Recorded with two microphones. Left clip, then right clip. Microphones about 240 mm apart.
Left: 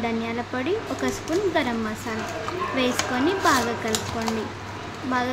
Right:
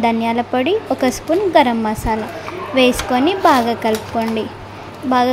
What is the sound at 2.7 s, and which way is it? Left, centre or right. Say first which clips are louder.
Speech: right 12 dB; right.